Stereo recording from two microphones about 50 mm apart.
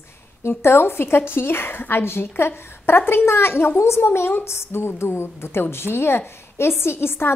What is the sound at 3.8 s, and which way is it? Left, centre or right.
A woman's voice, left.